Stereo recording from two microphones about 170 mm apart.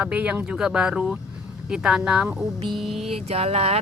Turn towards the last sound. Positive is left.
turn(degrees=-35)  # may be behind; listen again after turning